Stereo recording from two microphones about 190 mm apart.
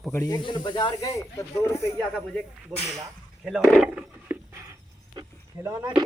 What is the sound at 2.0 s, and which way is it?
Cutlery, 5° left (ahead or behind).